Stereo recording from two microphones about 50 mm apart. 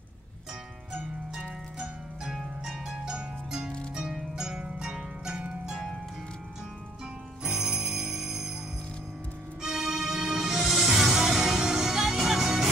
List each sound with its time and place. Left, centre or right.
1.8 s harp: centre
4.6 s music: centre
7.4 s jingle bell: centre
9.6 s music: centre